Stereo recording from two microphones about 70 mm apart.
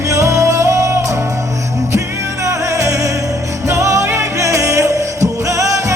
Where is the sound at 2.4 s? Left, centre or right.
Right.